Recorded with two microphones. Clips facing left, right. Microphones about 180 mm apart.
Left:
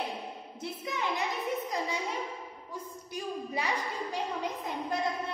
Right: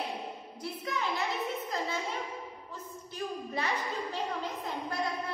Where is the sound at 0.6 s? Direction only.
20° left (ahead or behind).